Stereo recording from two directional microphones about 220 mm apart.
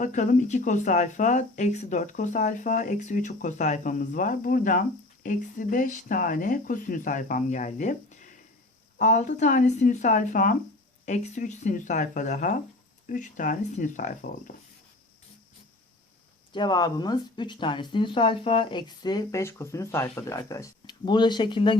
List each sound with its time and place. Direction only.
0.0 s speech: 35° left (ahead or behind)
16.5 s speech: 20° left (ahead or behind)